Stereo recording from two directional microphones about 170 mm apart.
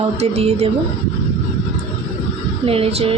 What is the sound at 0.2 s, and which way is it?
Speech, 40° right (ahead or behind).